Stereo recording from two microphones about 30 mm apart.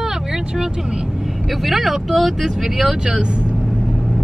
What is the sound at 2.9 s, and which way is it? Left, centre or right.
Speech, right.